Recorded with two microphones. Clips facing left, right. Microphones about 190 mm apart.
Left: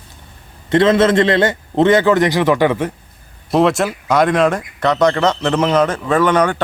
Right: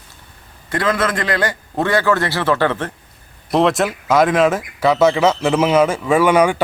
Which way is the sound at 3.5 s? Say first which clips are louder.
Left 1 dB; centre (ahead or behind).